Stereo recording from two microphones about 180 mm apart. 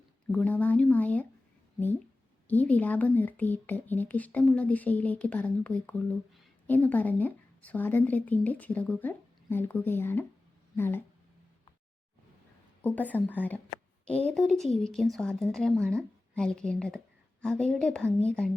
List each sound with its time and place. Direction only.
0.3 s speech: 10° left (ahead or behind)
2.5 s speech: 10° left (ahead or behind)
12.8 s speech: 10° left (ahead or behind)